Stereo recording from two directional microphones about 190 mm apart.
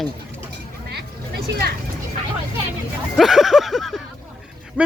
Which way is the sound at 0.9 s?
55° right (ahead or behind).